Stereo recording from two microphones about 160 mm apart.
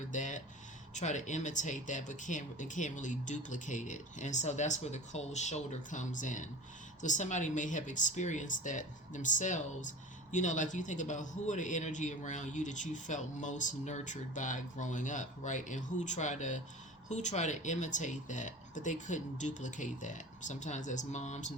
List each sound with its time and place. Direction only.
0.1 s a man's voice: 50° left (ahead or behind)